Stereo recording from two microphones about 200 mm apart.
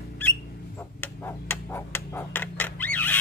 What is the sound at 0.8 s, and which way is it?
Hammer, 10° left (ahead or behind).